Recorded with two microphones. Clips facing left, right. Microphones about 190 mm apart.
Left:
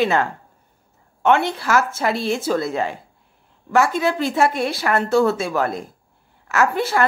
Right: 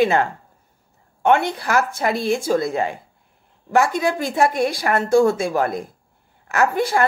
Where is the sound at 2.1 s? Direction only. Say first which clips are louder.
Right 2 dB; 50° right (ahead or behind).